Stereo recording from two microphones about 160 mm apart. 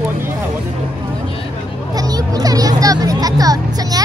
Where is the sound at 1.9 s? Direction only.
25° right (ahead or behind).